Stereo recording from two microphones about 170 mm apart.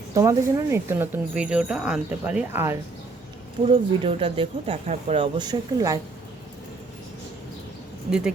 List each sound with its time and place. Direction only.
0.1 s speech: 20° right (ahead or behind)
3.7 s speech: 30° right (ahead or behind)
5.2 s a woman's voice: 25° right (ahead or behind)